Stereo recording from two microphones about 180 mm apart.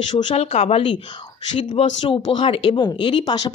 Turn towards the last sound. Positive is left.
turn(degrees=25)  # may be behind; listen again after turning